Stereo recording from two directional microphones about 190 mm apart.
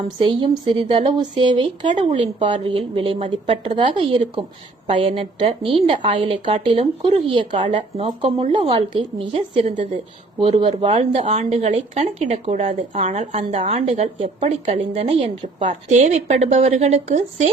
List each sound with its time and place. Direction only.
0.2 s a woman's voice: 25° right (ahead or behind)